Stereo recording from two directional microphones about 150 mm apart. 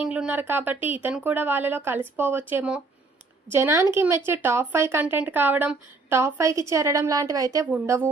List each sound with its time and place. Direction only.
0.0 s a woman's voice: 5° right (ahead or behind)